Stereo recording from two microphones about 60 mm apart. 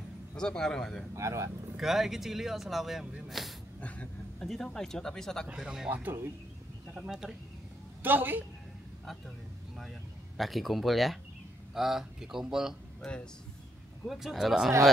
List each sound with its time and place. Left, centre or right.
0.4 s speech: centre
1.1 s speech: right
1.8 s speech: centre
3.8 s speech: left
4.6 s speech: centre
5.6 s speech: centre
5.9 s speech: right
6.9 s speech: centre
8.0 s a woman's voice: right
10.3 s speech: centre
13.0 s speech: centre
14.0 s speech: centre